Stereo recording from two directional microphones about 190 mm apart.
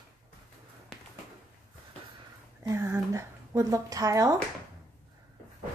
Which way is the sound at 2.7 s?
15° right (ahead or behind).